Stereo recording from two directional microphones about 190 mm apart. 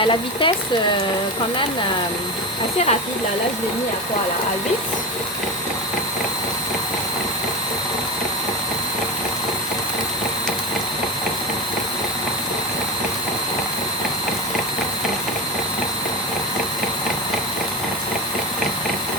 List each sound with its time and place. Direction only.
0.0 s speech: 25° left (ahead or behind)